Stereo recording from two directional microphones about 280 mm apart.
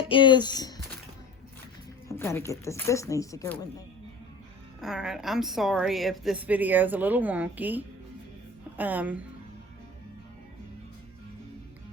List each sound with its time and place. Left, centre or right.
0.0 s speech: centre
2.0 s speech: centre
4.8 s a woman's voice: centre